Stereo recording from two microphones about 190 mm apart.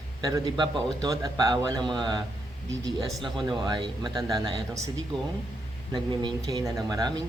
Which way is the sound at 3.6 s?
25° right (ahead or behind).